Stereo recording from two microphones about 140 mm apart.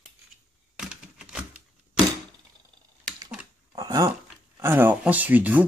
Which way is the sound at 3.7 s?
30° right (ahead or behind).